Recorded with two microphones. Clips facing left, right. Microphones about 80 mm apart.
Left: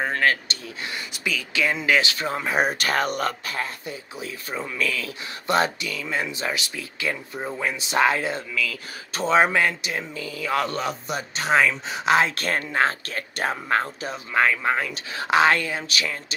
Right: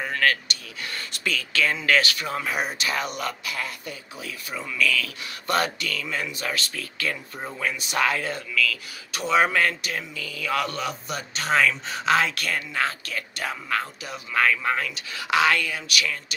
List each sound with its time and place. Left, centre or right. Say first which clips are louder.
0.2 s speech: left 1 dB; left
0.9 s speech: right 1 dB; centre; by 2.6 s left
2.6 s speech: left 5 dB; left